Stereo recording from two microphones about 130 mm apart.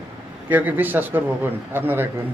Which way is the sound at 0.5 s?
15° right (ahead or behind).